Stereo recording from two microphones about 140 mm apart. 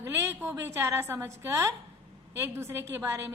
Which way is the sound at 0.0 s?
15° right (ahead or behind).